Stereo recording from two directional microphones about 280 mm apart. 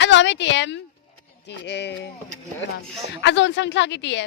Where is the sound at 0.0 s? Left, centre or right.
Left.